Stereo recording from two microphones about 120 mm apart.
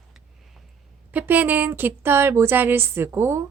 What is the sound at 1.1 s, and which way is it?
Speech, 15° right (ahead or behind).